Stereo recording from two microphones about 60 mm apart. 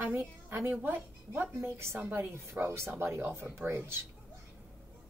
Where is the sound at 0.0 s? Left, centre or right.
Right.